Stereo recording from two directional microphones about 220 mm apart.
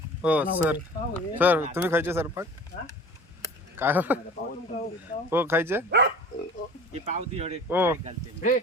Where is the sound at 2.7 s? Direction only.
35° left (ahead or behind).